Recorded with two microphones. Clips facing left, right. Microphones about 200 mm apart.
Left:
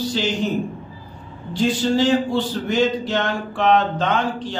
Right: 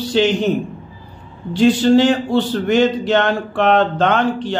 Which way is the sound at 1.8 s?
70° right (ahead or behind).